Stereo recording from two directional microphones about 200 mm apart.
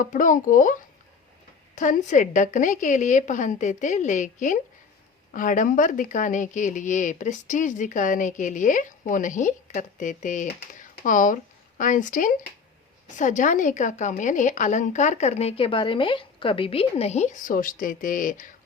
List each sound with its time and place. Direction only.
0.0 s speech: 40° left (ahead or behind)